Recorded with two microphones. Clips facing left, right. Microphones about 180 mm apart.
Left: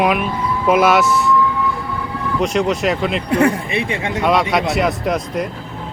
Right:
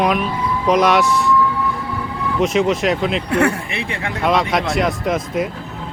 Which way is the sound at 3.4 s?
25° left (ahead or behind).